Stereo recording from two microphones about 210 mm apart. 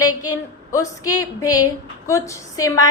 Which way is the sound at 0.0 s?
20° left (ahead or behind).